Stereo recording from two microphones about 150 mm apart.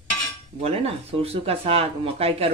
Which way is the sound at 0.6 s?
45° right (ahead or behind).